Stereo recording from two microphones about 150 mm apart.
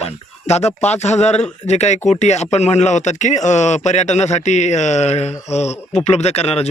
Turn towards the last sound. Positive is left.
turn(degrees=45)  # may be behind; listen again after turning